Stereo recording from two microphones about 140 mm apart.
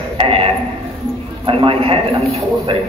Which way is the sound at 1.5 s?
40° right (ahead or behind).